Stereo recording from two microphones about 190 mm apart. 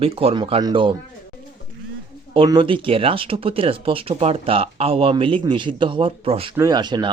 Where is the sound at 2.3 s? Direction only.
25° right (ahead or behind).